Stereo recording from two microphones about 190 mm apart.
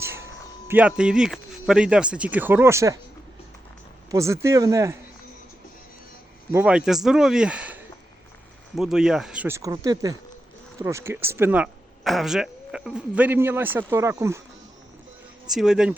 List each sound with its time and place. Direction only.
0.0 s a sound: 15° right (ahead or behind)
0.7 s speech: 5° right (ahead or behind)
4.1 s speech: 15° right (ahead or behind)
6.5 s speech: 10° right (ahead or behind)
15.4 s speech: centre (ahead or behind)